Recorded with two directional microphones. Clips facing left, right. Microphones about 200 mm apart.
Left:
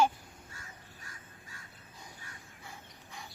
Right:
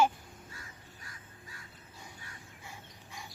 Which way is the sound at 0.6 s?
45° left (ahead or behind).